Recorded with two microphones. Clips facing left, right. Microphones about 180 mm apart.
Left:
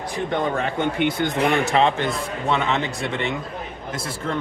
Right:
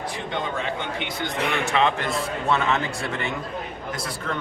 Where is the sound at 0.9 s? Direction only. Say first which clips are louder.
Left 7 dB; 55° left (ahead or behind); by 2.0 s 35° left (ahead or behind).